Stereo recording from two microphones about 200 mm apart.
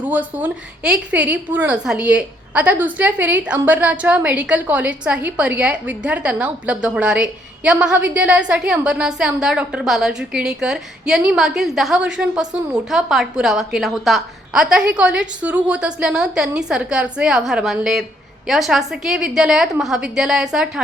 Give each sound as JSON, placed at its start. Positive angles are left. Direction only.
{"t": 0.0, "sound": "a woman's voice", "side_deg": -10}